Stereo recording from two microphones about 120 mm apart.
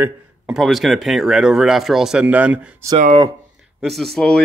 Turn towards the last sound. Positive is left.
turn(degrees=5)  # may be behind; listen again after turning